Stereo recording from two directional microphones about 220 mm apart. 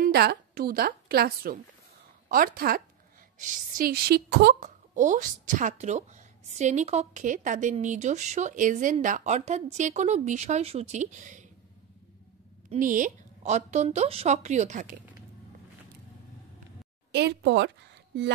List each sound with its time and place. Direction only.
0.0 s a woman's voice: 45° right (ahead or behind)
4.6 s a woman's voice: 35° right (ahead or behind)
12.7 s a woman's voice: 35° right (ahead or behind)
17.1 s speech: 50° right (ahead or behind)